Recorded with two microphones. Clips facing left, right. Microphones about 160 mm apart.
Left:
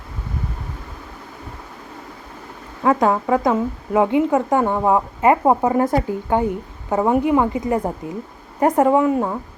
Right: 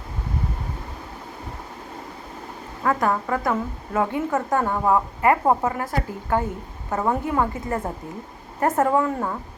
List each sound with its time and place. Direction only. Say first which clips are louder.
2.8 s a woman's voice: left 5 dB; 20° left (ahead or behind)